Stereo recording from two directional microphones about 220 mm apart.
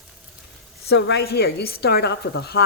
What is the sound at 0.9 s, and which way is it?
A man's voice, 50° left (ahead or behind).